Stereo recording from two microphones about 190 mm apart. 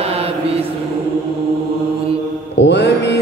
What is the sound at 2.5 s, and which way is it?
Mantra, 65° left (ahead or behind).